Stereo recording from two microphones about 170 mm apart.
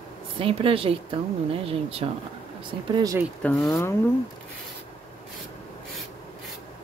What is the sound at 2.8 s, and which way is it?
Speech, 25° right (ahead or behind).